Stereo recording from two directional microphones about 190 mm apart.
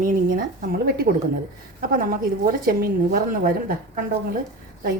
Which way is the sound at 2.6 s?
50° right (ahead or behind).